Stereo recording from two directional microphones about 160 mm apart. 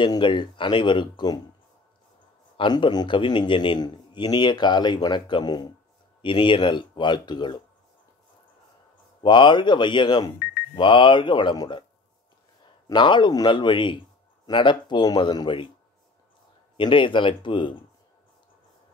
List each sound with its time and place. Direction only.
0.0 s a man's voice: 30° left (ahead or behind)
2.5 s a man's voice: 30° left (ahead or behind)
9.2 s a man's voice: 30° left (ahead or behind)
12.8 s a man's voice: 30° left (ahead or behind)
16.7 s speech: 30° left (ahead or behind)